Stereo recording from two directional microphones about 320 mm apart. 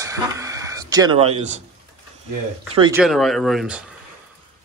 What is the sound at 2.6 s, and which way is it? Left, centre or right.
Speech, centre.